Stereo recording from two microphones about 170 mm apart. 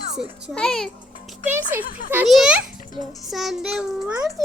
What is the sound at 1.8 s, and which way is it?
Speech, 55° left (ahead or behind).